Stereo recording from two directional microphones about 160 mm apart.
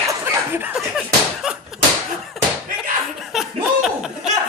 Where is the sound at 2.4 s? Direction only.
Centre (ahead or behind).